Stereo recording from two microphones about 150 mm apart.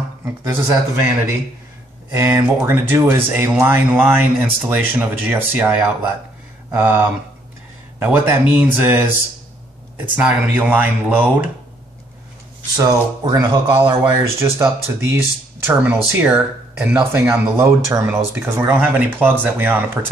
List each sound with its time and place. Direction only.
0.2 s speech: 15° right (ahead or behind)
2.1 s speech: 15° right (ahead or behind)
10.1 s speech: 10° right (ahead or behind)
12.7 s speech: 25° right (ahead or behind)